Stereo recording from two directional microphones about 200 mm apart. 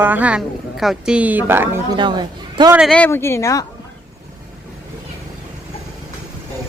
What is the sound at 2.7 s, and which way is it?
Speech, centre (ahead or behind).